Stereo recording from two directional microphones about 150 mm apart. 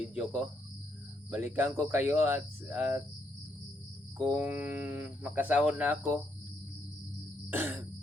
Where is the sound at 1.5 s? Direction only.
10° right (ahead or behind).